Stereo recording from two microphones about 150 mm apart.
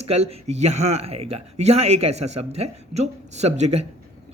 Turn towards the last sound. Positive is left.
turn(degrees=-45)  # may be behind; listen again after turning